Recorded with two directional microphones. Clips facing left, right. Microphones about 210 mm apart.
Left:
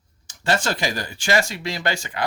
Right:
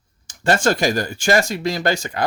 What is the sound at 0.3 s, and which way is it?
Speech, 50° right (ahead or behind).